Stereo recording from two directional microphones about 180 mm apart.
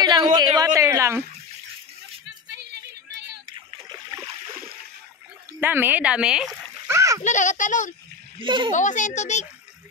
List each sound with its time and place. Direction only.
0.0 s a woman's voice: 25° right (ahead or behind)
2.4 s music: 70° right (ahead or behind)
5.5 s speech: 10° right (ahead or behind)
6.9 s splash: 15° right (ahead or behind)
7.2 s a child's voice: 45° left (ahead or behind)
8.4 s a woman's voice: 25° right (ahead or behind)
8.7 s a child's voice: 45° left (ahead or behind)